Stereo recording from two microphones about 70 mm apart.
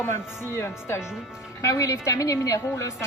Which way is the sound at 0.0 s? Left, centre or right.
Left.